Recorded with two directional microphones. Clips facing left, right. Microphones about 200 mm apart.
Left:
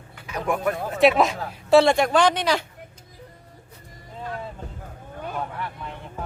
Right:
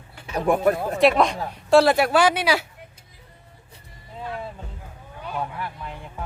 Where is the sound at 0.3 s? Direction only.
30° right (ahead or behind).